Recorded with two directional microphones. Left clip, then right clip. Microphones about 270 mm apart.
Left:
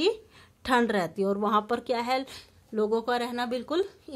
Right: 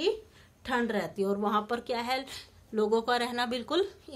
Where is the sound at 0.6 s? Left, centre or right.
Left.